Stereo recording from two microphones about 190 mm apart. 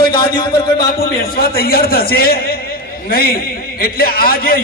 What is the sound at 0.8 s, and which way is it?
A man's voice, 55° left (ahead or behind).